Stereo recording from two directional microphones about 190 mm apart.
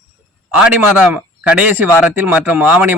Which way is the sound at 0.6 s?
5° right (ahead or behind).